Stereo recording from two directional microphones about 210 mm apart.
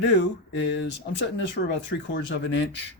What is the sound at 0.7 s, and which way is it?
Speech, 55° left (ahead or behind).